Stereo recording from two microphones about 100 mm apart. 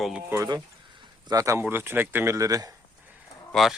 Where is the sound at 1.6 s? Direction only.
20° right (ahead or behind).